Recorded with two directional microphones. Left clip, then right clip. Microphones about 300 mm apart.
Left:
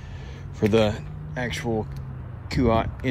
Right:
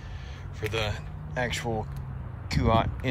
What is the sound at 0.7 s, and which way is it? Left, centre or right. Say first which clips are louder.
Speech: left 10 dB; centre.